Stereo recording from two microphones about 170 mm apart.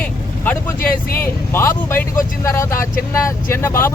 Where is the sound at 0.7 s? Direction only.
60° left (ahead or behind).